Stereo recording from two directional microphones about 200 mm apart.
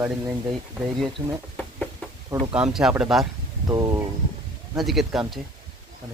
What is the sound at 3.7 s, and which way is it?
Speech, 15° right (ahead or behind).